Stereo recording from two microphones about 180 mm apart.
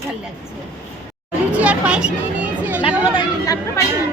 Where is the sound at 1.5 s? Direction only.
10° right (ahead or behind).